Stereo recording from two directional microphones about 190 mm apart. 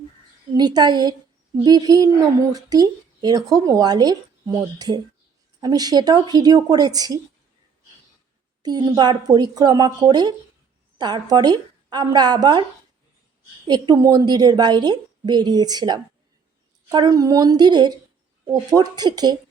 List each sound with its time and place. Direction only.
0.5 s speech: 20° right (ahead or behind)
8.6 s speech: 20° right (ahead or behind)
13.7 s speech: 20° right (ahead or behind)